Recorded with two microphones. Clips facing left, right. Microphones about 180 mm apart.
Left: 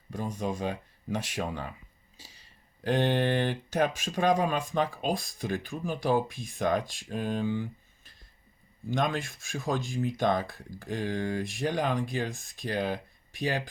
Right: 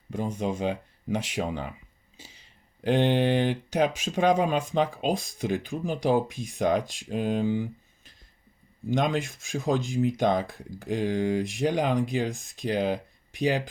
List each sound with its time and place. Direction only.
0.1 s speech: 20° right (ahead or behind)
2.8 s speech: 20° right (ahead or behind)
8.9 s speech: 20° right (ahead or behind)